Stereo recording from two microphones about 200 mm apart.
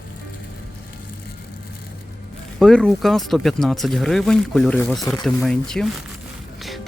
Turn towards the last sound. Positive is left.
turn(degrees=0)  # may be behind; listen again after turning